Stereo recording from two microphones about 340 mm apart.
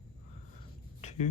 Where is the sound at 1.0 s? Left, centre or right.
Centre.